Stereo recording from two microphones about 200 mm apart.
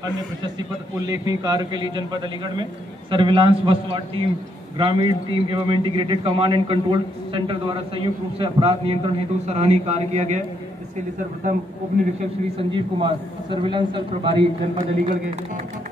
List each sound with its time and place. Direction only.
1.0 s a man's voice: 20° right (ahead or behind); by 10.4 s 35° right (ahead or behind)
12.5 s a man's voice: 25° right (ahead or behind)